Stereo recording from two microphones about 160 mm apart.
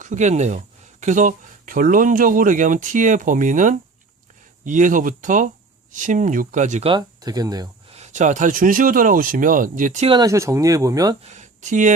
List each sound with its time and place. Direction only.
0.0 s speech: 50° right (ahead or behind)
6.8 s speech: 25° right (ahead or behind)
7.9 s speech: 45° right (ahead or behind)
10.1 s speech: 25° right (ahead or behind)
11.2 s speech: 45° right (ahead or behind)